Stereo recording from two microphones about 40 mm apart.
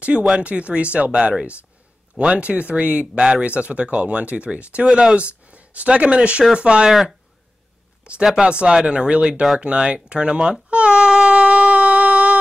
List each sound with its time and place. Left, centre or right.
0.0 s speech: right
2.3 s speech: right
3.2 s speech: right
3.4 s speech: right
6.9 s speech: centre
8.2 s speech: centre
8.5 s speech: right
9.3 s speech: centre
9.6 s speech: right
10.7 s baby cry: right